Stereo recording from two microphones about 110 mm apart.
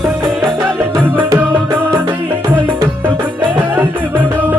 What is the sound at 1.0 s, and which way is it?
Music, 20° right (ahead or behind).